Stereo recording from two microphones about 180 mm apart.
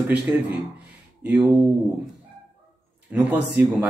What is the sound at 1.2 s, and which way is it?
Speech, 5° right (ahead or behind).